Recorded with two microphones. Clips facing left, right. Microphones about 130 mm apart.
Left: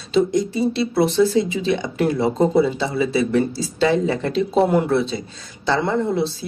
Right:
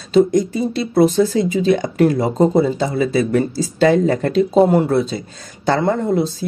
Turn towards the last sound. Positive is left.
turn(degrees=-45)  # may be behind; listen again after turning